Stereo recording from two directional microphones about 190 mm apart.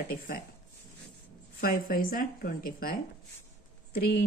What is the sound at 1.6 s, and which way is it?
Speech, 50° left (ahead or behind).